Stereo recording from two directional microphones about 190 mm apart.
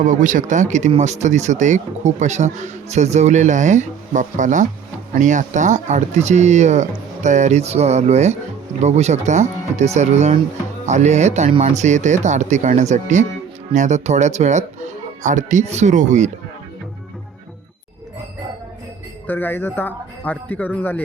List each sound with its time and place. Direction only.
0.0 s speech: 45° right (ahead or behind)
19.3 s speech: 10° left (ahead or behind)